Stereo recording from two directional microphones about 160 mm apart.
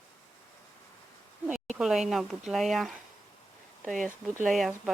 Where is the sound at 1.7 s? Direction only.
Centre (ahead or behind).